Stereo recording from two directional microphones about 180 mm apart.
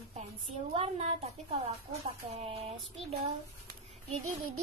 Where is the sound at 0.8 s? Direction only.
35° right (ahead or behind).